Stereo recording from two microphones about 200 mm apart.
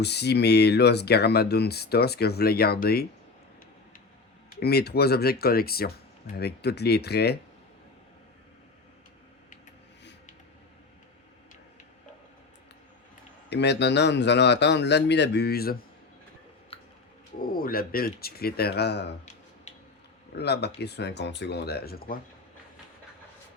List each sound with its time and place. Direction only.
0.0 s speech: 55° left (ahead or behind)
4.6 s speech: 55° left (ahead or behind)
13.5 s speech: 60° left (ahead or behind)
17.4 s speech: 45° left (ahead or behind)
20.3 s speech: 55° left (ahead or behind)